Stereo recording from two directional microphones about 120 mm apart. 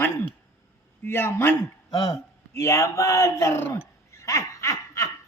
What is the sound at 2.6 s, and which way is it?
A man's voice, 25° left (ahead or behind).